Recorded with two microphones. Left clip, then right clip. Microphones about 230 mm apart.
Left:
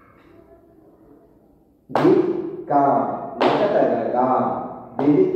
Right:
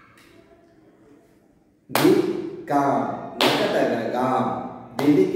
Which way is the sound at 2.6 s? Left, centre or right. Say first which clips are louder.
Left 4 dB; right.